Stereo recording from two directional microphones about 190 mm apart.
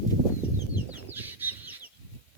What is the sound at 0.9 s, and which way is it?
Chicken, 10° right (ahead or behind).